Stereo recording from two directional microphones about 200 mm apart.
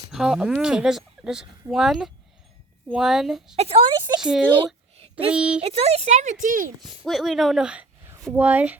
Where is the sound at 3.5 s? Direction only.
30° right (ahead or behind).